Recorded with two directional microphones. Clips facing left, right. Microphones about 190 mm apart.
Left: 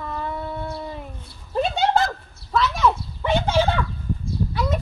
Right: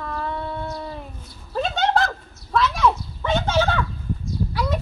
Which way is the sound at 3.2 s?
20° left (ahead or behind).